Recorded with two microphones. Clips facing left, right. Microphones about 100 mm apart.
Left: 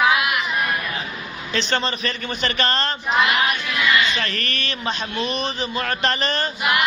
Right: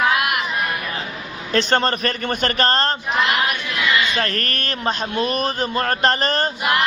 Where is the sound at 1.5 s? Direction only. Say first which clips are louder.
Right 5 dB; 50° right (ahead or behind).